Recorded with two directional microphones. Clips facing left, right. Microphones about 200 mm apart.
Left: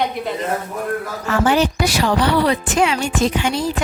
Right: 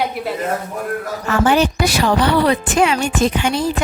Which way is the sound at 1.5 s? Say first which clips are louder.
Right 1 dB; 55° right (ahead or behind).